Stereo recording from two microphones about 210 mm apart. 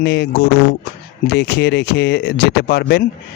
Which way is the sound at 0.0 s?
55° left (ahead or behind).